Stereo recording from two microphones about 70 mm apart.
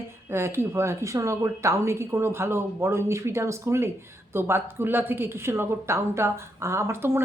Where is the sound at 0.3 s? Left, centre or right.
Right.